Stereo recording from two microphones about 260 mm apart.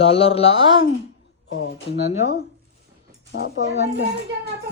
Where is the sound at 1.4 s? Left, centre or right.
Left.